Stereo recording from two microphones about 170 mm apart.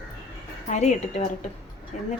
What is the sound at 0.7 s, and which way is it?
Speech, 40° left (ahead or behind).